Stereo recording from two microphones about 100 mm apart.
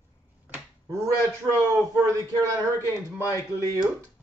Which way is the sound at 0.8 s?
35° right (ahead or behind).